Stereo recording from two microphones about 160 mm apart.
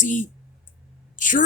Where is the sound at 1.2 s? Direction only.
55° left (ahead or behind).